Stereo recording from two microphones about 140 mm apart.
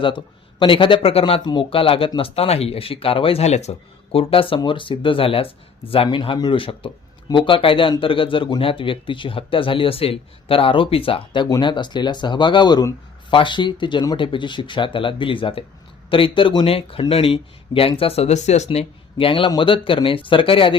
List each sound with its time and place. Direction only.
0.0 s speech: 35° left (ahead or behind)